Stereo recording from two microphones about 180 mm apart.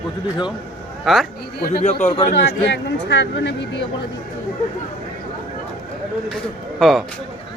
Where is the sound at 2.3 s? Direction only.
70° left (ahead or behind).